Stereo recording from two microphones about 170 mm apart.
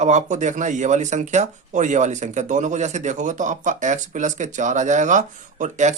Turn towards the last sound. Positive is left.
turn(degrees=-45)  # may be behind; listen again after turning